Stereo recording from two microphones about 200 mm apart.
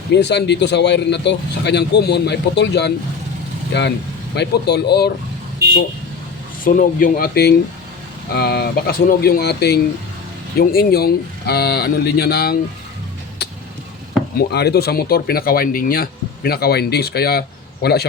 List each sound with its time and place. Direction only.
0.1 s speech: 60° left (ahead or behind)
6.7 s speech: 45° left (ahead or behind)
14.3 s speech: 55° left (ahead or behind)